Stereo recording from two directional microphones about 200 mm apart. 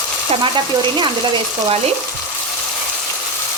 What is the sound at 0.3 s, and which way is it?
Frying, 25° right (ahead or behind).